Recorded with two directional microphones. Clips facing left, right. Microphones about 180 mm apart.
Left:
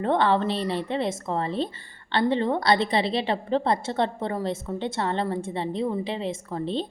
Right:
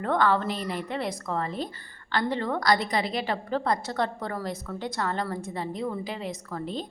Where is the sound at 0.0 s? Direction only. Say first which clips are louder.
Left 2 dB; 25° left (ahead or behind).